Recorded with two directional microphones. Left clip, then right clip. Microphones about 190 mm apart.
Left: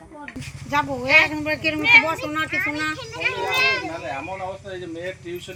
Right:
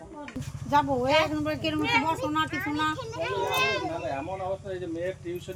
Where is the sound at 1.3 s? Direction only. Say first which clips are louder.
Left 6 dB; 65° right (ahead or behind).